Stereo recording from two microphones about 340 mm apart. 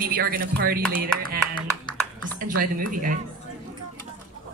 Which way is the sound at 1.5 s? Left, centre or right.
Centre.